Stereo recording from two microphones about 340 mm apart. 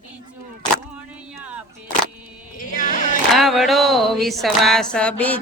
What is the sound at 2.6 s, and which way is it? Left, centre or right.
Music, left.